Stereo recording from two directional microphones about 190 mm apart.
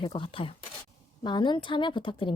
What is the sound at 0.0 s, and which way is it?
A woman's voice, 30° left (ahead or behind).